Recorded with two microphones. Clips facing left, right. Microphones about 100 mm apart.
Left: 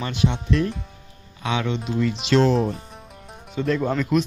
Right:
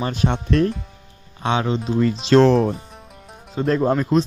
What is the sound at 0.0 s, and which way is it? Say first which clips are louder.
Speech: right 2 dB; 40° right (ahead or behind).